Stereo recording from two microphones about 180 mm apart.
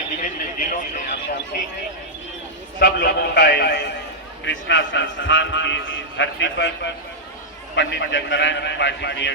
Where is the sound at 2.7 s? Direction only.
60° left (ahead or behind).